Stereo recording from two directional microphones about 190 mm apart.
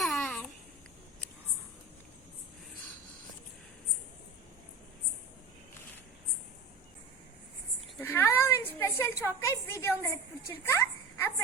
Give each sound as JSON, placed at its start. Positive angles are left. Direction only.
{"t": 0.0, "sound": "babbling", "side_deg": 0}
{"t": 8.0, "sound": "a sound", "side_deg": 15}
{"t": 10.0, "sound": "a woman's voice", "side_deg": 15}